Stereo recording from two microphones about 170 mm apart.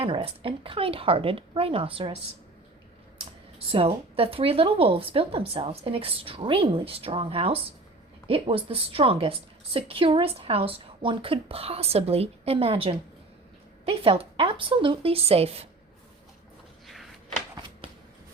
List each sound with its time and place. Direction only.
0.0 s a woman's voice: 30° right (ahead or behind)
3.7 s a woman's voice: 35° right (ahead or behind)
16.8 s a sound: centre (ahead or behind)